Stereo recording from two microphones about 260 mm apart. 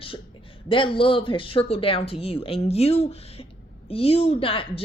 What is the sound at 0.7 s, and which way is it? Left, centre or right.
Speech, centre.